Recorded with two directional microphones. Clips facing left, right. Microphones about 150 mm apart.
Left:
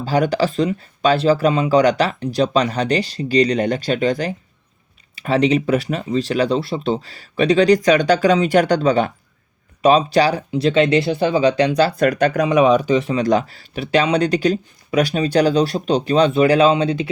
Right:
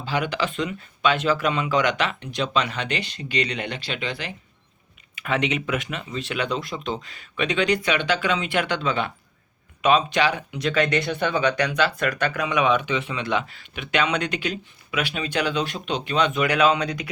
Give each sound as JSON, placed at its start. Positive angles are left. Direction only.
{"t": 0.0, "sound": "speech", "side_deg": 40}